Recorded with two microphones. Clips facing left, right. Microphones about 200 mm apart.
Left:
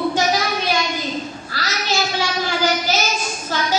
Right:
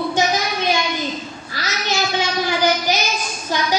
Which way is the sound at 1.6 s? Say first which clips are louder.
Even; 15° right (ahead or behind).